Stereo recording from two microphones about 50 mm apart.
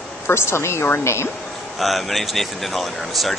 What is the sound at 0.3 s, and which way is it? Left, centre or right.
Speech, left.